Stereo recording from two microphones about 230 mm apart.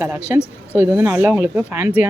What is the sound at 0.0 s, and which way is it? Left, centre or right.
Speech, centre.